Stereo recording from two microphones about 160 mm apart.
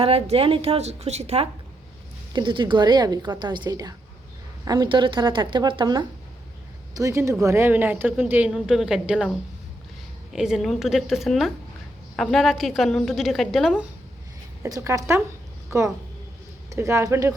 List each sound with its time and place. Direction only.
0.0 s a woman's voice: 35° right (ahead or behind)
2.3 s a woman's voice: 30° right (ahead or behind); by 9.3 s 5° right (ahead or behind)
10.3 s a woman's voice: 5° right (ahead or behind)
14.6 s a woman's voice: 20° right (ahead or behind)
16.6 s speech: 20° right (ahead or behind)